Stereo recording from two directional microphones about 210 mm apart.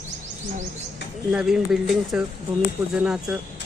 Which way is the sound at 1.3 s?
5° right (ahead or behind).